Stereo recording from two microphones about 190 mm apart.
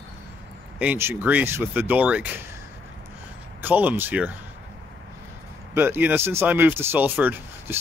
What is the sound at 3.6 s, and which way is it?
Speech, 10° right (ahead or behind).